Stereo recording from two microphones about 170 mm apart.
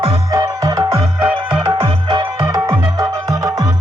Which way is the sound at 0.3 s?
20° right (ahead or behind).